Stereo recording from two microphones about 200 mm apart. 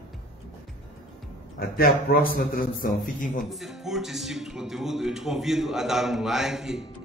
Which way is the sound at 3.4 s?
Centre (ahead or behind).